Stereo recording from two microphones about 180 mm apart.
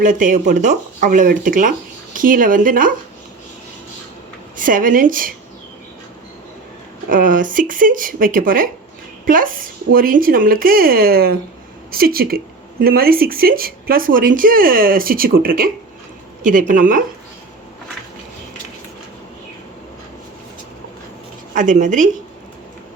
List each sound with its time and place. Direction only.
0.0 s speech: 45° right (ahead or behind)
4.5 s speech: 50° right (ahead or behind)
7.1 s speech: 50° right (ahead or behind)
21.5 s speech: 45° right (ahead or behind)